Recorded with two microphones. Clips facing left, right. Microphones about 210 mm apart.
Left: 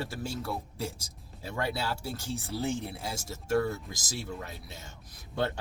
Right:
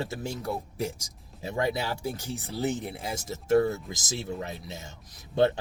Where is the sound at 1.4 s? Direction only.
20° right (ahead or behind).